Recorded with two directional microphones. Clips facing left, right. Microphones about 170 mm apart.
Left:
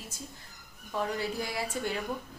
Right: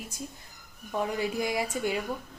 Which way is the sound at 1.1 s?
15° right (ahead or behind).